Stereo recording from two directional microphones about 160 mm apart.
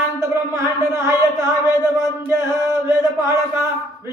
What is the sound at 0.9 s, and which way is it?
Chant, 20° right (ahead or behind).